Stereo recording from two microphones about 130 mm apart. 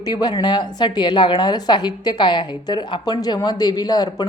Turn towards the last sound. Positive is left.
turn(degrees=30)  # may be behind; listen again after turning